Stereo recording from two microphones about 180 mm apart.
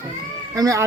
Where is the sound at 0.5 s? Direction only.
20° right (ahead or behind).